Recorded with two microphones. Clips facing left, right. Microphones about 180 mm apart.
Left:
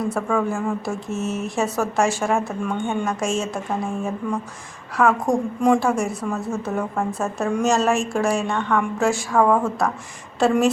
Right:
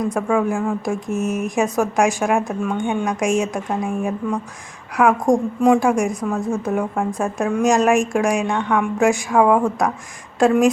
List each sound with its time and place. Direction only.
0.0 s a woman's voice: 10° right (ahead or behind)